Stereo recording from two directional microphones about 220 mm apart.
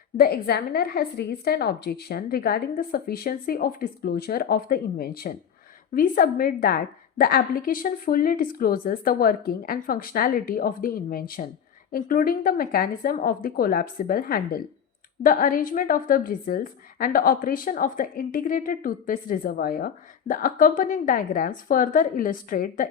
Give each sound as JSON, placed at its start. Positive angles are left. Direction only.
{"t": 0.2, "sound": "a woman's voice", "side_deg": 45}